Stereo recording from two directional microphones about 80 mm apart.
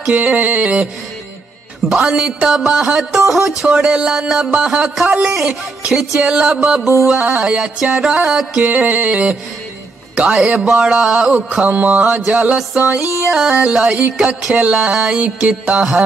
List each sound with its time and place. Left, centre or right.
0.0 s music: centre
1.9 s music: centre
11.3 s music: centre